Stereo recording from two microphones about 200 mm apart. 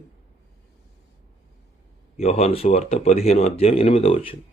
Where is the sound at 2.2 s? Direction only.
30° left (ahead or behind).